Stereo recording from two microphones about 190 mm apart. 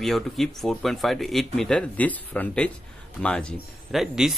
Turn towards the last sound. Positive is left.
turn(degrees=0)  # may be behind; listen again after turning